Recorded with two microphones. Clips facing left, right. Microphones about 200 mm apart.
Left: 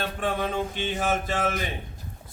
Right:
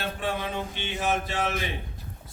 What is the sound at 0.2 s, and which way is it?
Music, 50° left (ahead or behind).